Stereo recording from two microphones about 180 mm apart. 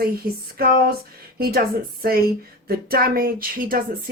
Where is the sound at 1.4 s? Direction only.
55° right (ahead or behind).